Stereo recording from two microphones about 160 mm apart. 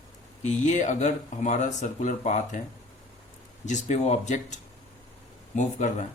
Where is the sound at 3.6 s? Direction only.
50° left (ahead or behind).